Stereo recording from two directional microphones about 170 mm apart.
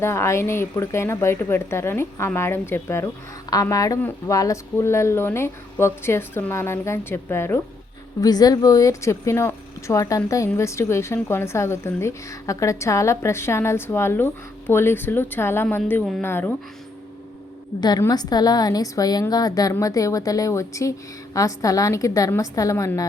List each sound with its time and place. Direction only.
0.0 s speech: 15° left (ahead or behind)
17.7 s a woman's voice: 25° left (ahead or behind)